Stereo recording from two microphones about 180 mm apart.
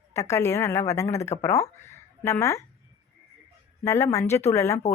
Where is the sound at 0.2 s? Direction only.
15° left (ahead or behind).